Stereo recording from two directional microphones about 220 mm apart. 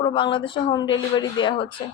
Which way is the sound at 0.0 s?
20° left (ahead or behind).